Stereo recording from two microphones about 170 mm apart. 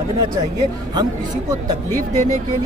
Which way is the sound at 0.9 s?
20° right (ahead or behind).